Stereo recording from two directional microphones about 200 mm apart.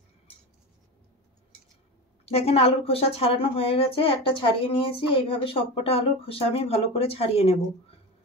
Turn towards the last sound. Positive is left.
turn(degrees=30)  # may be behind; listen again after turning